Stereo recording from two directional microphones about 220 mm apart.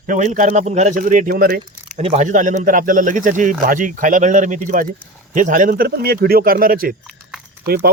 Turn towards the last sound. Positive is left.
turn(degrees=-45)  # may be behind; listen again after turning